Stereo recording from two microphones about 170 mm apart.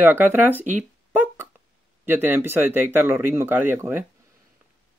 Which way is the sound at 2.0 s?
10° right (ahead or behind).